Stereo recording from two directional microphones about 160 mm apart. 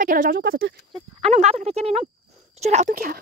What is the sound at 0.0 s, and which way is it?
Speech, 60° right (ahead or behind).